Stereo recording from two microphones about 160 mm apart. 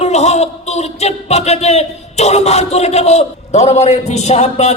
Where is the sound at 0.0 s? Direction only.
45° left (ahead or behind).